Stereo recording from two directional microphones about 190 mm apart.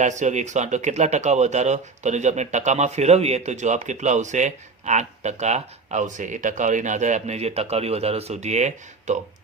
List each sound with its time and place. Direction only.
0.0 s speech: 40° right (ahead or behind)